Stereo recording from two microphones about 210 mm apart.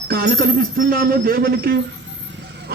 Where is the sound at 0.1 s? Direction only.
45° right (ahead or behind).